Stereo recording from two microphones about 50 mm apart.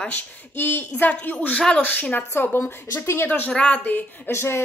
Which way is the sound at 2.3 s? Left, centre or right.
Left.